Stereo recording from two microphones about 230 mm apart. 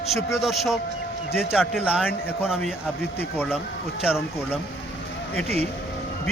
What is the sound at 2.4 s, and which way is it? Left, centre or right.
Speech, centre.